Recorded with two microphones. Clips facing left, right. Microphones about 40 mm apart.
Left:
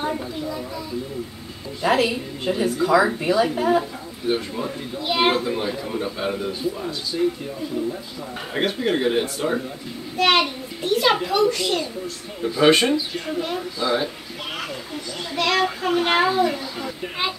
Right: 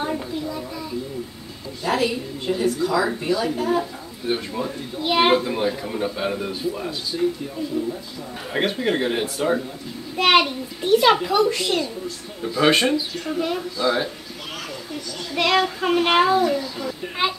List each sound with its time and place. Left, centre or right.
0.0 s a sound: centre
2.0 s a woman's voice: centre
4.3 s speech: centre
4.9 s speech: centre
7.1 s a woman's voice: centre
8.5 s speech: centre
10.1 s a child's voice: centre
15.3 s a child's voice: centre
16.3 s a woman's voice: centre